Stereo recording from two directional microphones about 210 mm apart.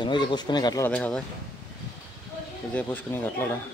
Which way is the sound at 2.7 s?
10° left (ahead or behind).